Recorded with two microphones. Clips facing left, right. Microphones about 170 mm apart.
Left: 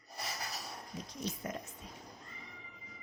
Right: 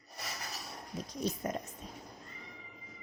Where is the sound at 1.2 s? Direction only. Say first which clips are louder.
Right 5 dB; 40° right (ahead or behind).